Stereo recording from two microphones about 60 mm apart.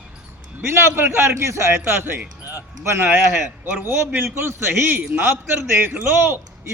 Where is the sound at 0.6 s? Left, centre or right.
Right.